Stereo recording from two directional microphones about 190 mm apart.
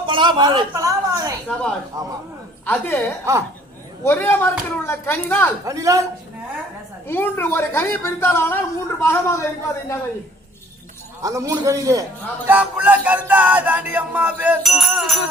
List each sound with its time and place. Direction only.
0.0 s a man's voice: 25° right (ahead or behind)
2.6 s a woman's voice: 10° left (ahead or behind)
4.0 s a woman's voice: 10° left (ahead or behind)
5.6 s music: 15° right (ahead or behind)
7.1 s a woman's voice: 10° left (ahead or behind)
11.2 s music: 15° right (ahead or behind)